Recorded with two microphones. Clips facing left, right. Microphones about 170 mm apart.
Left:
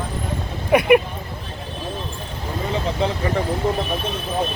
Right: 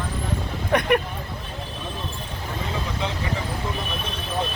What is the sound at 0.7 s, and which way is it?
Speech, 10° left (ahead or behind).